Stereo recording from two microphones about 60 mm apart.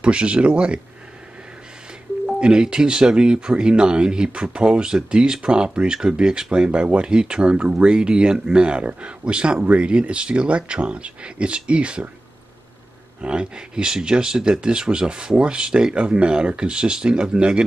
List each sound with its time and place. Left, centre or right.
0.0 s speech: centre
2.4 s speech: centre
13.2 s speech: centre